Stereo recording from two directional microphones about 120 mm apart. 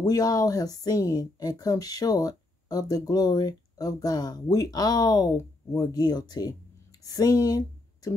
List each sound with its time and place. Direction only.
0.0 s speech: 30° left (ahead or behind)